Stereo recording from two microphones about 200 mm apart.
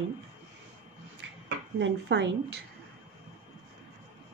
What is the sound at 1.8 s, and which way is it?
Speech, 60° right (ahead or behind).